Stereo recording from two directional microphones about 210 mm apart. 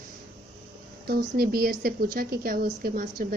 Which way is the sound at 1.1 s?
45° right (ahead or behind).